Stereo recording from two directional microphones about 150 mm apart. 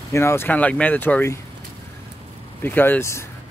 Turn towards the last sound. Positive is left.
turn(degrees=20)  # may be behind; listen again after turning